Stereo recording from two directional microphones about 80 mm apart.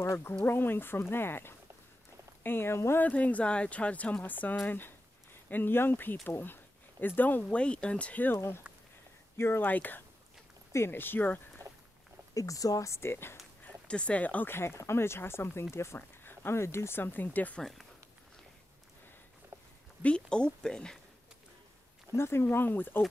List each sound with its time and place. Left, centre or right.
0.0 s speech: left
0.5 s speech: left
3.0 s speech: centre
12.4 s speech: left
13.8 s speech: centre
17.6 s speech: centre
19.5 s a sound: right
20.0 s speech: centre
22.1 s speech: left